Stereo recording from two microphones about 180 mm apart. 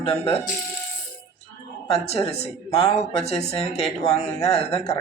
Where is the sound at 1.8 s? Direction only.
35° left (ahead or behind).